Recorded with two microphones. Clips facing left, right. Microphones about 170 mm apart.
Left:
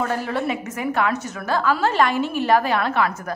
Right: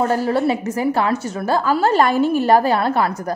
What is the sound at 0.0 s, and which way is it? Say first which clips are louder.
A woman's voice: right 6 dB; 35° right (ahead or behind).